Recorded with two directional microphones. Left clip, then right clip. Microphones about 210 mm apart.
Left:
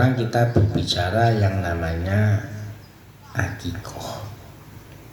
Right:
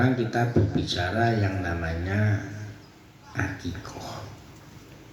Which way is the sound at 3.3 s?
50° left (ahead or behind).